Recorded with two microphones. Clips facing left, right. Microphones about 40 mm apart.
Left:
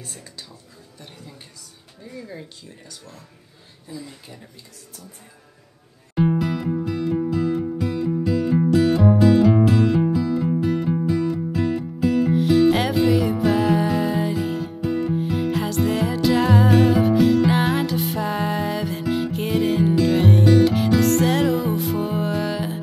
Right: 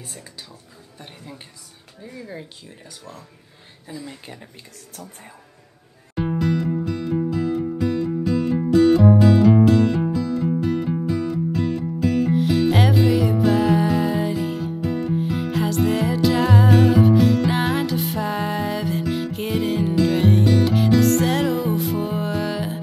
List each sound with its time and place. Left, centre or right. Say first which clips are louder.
0.0 s a woman's voice: even; centre
0.9 s a sound: right 2 dB; right
2.0 s speech: right 1 dB; centre
3.8 s speech: right 1 dB; right
6.1 s music: left 1 dB; centre